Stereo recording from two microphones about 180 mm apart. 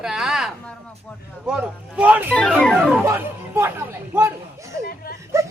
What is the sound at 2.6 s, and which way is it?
Speech, 5° left (ahead or behind).